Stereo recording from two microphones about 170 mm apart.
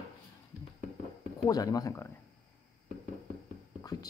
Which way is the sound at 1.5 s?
20° left (ahead or behind).